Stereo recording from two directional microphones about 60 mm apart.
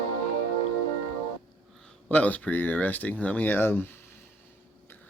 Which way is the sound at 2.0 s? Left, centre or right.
Left.